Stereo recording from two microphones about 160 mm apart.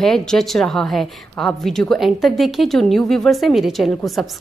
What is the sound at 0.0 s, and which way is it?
A woman's voice, 5° left (ahead or behind).